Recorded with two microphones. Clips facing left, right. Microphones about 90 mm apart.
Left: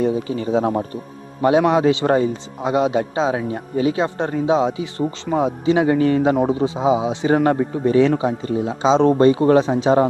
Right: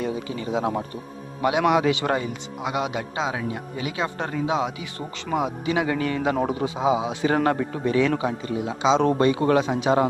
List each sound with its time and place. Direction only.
0.0 s a man's voice: 30° left (ahead or behind)